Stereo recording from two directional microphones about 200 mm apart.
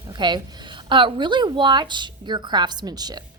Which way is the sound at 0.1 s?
20° right (ahead or behind).